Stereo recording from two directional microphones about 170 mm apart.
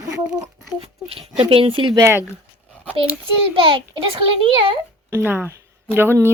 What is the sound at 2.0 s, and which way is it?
Speech, 15° right (ahead or behind).